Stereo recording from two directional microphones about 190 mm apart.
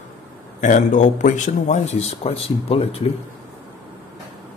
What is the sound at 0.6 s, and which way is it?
Speech, 40° left (ahead or behind).